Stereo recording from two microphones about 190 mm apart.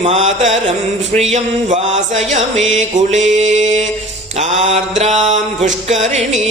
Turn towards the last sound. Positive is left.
turn(degrees=-35)  # may be behind; listen again after turning